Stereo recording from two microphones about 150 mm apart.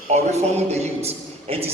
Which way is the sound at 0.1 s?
50° right (ahead or behind).